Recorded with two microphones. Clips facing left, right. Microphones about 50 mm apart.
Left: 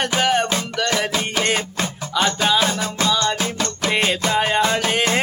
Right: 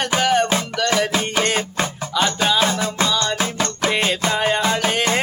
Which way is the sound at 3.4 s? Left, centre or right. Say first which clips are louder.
Right 2 dB; centre.